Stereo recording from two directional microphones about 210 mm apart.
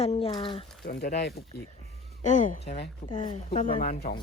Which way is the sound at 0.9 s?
50° left (ahead or behind).